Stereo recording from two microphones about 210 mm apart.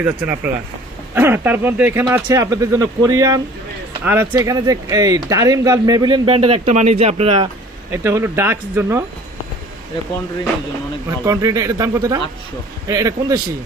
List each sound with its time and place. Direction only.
0.0 s speech: 10° right (ahead or behind); by 7.4 s 30° right (ahead or behind)
7.9 s speech: 10° right (ahead or behind)
11.3 s speech: 15° right (ahead or behind)